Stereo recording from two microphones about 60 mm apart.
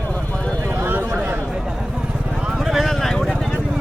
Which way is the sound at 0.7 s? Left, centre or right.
Right.